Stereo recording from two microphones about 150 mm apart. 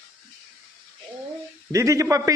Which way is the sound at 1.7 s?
20° right (ahead or behind).